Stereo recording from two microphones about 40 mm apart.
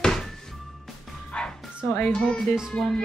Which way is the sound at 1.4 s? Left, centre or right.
Left.